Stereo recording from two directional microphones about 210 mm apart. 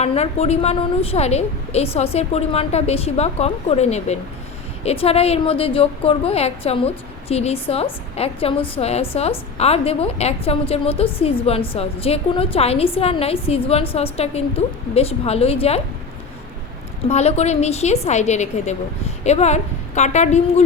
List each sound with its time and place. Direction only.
0.0 s a woman's voice: 30° left (ahead or behind)
17.1 s a woman's voice: 30° left (ahead or behind)